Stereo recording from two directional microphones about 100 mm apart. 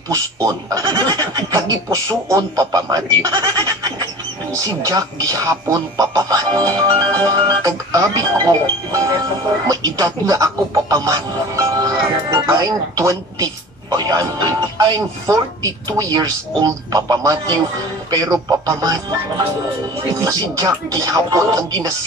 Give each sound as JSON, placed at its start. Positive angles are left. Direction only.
{"t": 0.1, "sound": "speech", "side_deg": -35}